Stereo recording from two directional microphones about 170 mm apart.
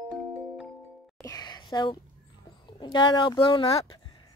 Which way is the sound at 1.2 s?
20° left (ahead or behind).